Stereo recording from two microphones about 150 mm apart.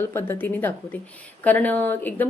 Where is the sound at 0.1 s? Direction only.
15° left (ahead or behind).